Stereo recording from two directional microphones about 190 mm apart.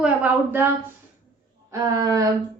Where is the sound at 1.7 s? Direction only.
15° right (ahead or behind).